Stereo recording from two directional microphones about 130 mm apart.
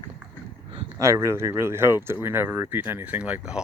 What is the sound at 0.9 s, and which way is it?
Speech, 25° right (ahead or behind).